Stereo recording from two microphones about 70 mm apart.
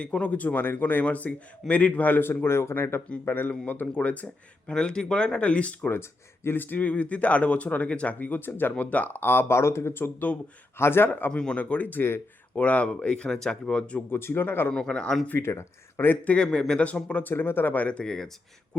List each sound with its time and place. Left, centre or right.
0.0 s a man's voice: centre
5.9 s a man's voice: left
11.3 s a man's voice: centre; by 12.2 s left
12.5 s speech: centre
14.1 s speech: left
14.7 s speech: centre
15.4 s speech: left
16.3 s speech: centre
17.3 s a man's voice: left; by 18.3 s centre